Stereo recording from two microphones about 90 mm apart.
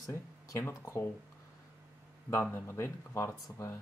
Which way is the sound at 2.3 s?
25° left (ahead or behind).